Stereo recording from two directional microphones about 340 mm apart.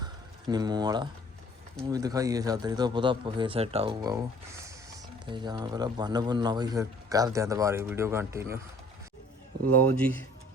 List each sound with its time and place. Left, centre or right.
0.0 s a sound: centre
1.8 s a man's voice: centre
5.2 s a man's voice: centre
10.0 s speech: centre